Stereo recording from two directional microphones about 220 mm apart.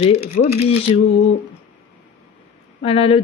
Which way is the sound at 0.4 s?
35° left (ahead or behind).